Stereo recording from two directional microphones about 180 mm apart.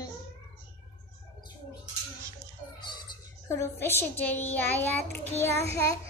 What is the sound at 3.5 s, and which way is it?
A child's voice, 15° left (ahead or behind).